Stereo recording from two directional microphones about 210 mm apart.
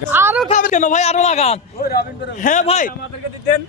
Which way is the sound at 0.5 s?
35° left (ahead or behind).